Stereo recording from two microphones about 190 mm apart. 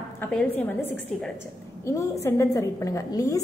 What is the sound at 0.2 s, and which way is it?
A woman's voice, 10° left (ahead or behind).